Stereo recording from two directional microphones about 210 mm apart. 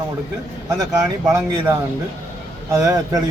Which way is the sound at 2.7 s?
15° right (ahead or behind).